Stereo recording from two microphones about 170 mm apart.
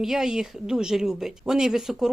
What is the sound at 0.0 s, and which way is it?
Speech, centre (ahead or behind).